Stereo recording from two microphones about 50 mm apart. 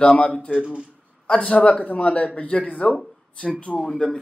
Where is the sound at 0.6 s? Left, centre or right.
Centre.